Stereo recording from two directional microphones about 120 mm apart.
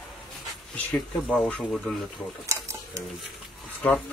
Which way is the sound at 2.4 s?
25° right (ahead or behind).